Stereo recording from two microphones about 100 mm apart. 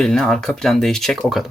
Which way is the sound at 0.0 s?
5° left (ahead or behind).